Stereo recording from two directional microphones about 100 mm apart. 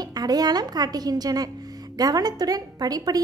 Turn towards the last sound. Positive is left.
turn(degrees=-40)  # may be behind; listen again after turning